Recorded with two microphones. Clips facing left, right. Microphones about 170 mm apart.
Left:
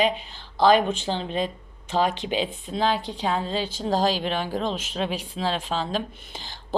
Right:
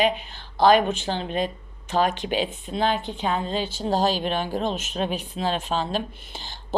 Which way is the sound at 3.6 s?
90° left.